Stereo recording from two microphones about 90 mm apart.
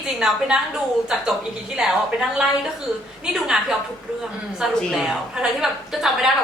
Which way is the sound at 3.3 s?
5° right (ahead or behind).